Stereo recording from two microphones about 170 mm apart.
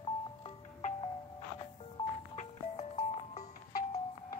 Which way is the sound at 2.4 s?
45° left (ahead or behind).